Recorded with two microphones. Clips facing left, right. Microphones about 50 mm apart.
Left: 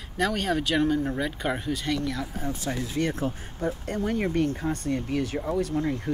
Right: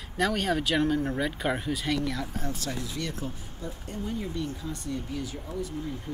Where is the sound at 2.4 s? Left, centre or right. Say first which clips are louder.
Left 3 dB; centre.